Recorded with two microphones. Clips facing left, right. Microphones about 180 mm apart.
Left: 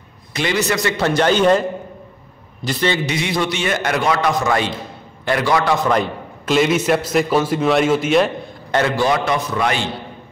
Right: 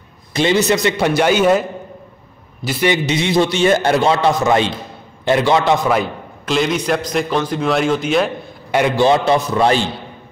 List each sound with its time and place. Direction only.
0.3 s a man's voice: 25° right (ahead or behind); by 2.9 s 5° right (ahead or behind)
2.9 s a man's voice: 25° right (ahead or behind)
5.9 s a man's voice: centre (ahead or behind)
8.7 s a man's voice: 20° right (ahead or behind)